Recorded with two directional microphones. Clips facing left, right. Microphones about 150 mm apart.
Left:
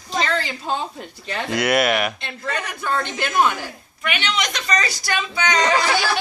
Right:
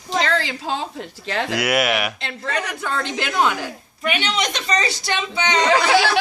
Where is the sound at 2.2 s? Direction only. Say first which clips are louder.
Right 2 dB; 90° right.